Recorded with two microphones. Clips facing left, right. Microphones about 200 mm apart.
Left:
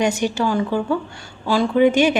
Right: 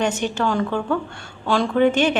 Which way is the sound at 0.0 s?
10° left (ahead or behind).